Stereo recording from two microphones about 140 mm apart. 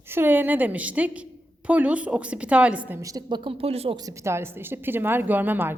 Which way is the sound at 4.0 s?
25° right (ahead or behind).